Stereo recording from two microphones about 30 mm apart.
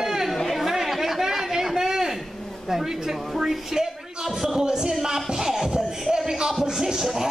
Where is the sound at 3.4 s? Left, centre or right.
Centre.